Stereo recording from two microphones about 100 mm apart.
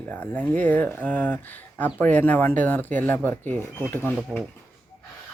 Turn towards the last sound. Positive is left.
turn(degrees=20)  # may be behind; listen again after turning